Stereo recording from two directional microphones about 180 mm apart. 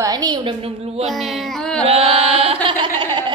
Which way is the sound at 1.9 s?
30° right (ahead or behind).